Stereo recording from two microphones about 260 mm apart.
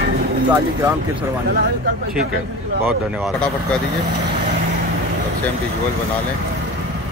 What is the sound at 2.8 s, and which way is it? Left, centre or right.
Speech, centre.